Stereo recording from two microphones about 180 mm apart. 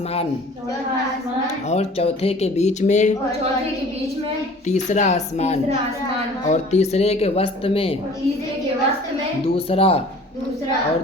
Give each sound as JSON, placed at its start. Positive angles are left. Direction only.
{"t": 1.7, "sound": "speech", "side_deg": 35}
{"t": 4.6, "sound": "speech", "side_deg": 40}
{"t": 9.6, "sound": "speech", "side_deg": 30}